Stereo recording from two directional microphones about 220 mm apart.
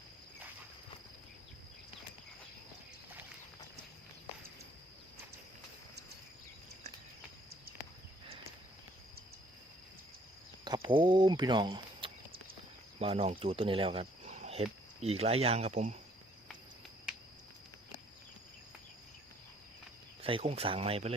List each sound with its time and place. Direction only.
10.6 s speech: 20° right (ahead or behind)
20.2 s speech: 25° right (ahead or behind)